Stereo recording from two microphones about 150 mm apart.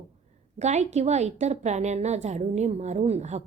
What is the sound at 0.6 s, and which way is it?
A woman's voice, 50° right (ahead or behind).